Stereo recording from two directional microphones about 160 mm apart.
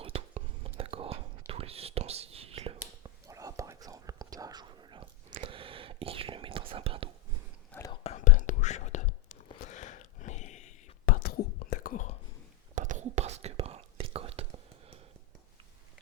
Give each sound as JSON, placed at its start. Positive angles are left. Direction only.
{"t": 0.0, "sound": "whispering", "side_deg": -35}
{"t": 3.2, "sound": "whispering", "side_deg": -20}
{"t": 7.7, "sound": "whispering", "side_deg": 10}
{"t": 8.1, "sound": "whispering", "side_deg": 50}
{"t": 12.7, "sound": "whispering", "side_deg": -50}